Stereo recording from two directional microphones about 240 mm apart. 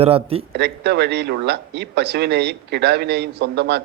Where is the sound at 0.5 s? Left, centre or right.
Right.